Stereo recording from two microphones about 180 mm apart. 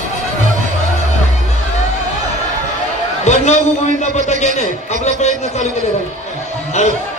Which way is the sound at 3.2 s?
40° left (ahead or behind).